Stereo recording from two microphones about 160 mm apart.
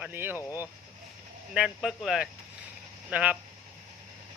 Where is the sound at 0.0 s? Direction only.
10° right (ahead or behind).